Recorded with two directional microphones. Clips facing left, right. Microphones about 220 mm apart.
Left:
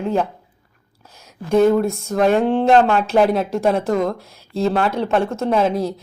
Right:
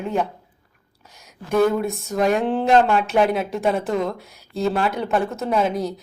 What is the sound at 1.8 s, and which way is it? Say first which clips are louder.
Speech: left 4 dB; centre (ahead or behind).